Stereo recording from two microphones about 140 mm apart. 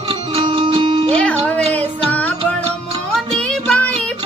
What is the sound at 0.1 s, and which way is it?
Music, 40° right (ahead or behind).